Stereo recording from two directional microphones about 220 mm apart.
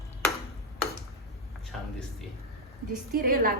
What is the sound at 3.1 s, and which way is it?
Speech, 40° right (ahead or behind).